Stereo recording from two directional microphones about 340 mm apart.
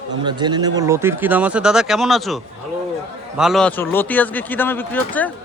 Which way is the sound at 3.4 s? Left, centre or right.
Centre.